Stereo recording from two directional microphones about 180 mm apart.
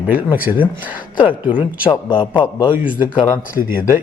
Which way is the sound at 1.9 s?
30° left (ahead or behind).